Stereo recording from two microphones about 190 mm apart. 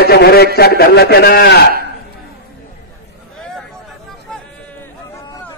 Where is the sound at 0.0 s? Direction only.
55° left (ahead or behind).